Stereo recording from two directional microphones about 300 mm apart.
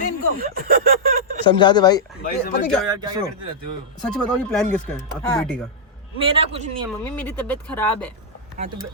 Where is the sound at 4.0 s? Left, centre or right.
Centre.